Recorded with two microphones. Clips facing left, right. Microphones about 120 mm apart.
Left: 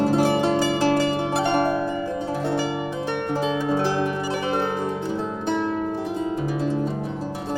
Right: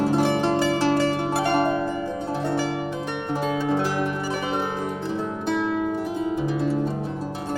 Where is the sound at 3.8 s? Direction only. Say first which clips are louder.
Left 2 dB; 25° left (ahead or behind).